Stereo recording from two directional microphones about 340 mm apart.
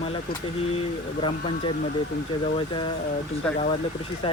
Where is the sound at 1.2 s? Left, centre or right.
Centre.